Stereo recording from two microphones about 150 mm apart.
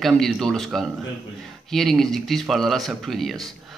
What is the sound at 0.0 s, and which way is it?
Speech, centre (ahead or behind).